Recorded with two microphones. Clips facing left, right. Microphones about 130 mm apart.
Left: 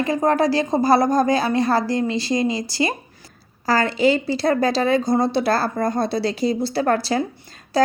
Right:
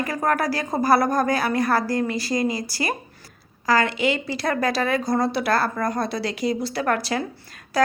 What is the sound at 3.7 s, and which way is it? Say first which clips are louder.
Speech: left 3 dB; 35° left (ahead or behind).